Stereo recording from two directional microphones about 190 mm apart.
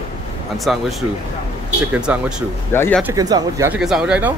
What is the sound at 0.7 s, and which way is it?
Speech, centre (ahead or behind).